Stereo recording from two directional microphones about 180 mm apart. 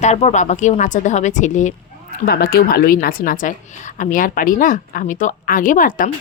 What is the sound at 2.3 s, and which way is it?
A woman's voice, 60° left (ahead or behind).